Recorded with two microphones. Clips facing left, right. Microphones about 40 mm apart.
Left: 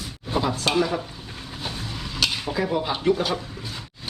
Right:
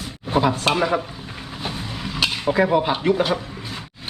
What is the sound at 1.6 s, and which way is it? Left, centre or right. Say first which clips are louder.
Vehicle: right 4 dB; centre.